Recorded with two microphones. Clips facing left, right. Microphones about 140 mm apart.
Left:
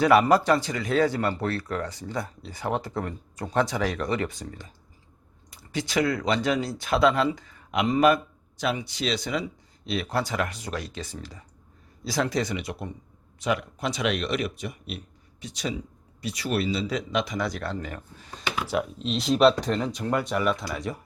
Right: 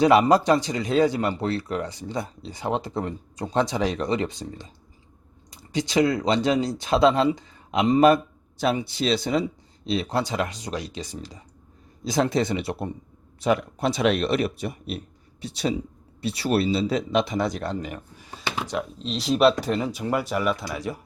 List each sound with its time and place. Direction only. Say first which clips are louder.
0.0 s speech: right 2 dB; 20° right (ahead or behind)
18.7 s speech: left 2 dB; centre (ahead or behind)